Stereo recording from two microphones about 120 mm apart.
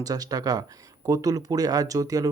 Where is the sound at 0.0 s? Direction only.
30° right (ahead or behind).